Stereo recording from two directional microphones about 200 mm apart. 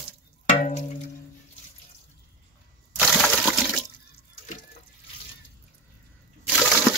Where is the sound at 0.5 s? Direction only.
35° left (ahead or behind).